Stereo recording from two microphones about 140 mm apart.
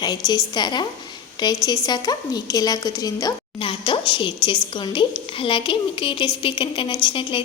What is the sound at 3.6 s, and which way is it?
A woman's voice, 40° left (ahead or behind).